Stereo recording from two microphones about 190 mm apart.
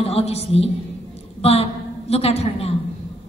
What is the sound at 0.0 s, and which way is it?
A woman's voice, 35° left (ahead or behind).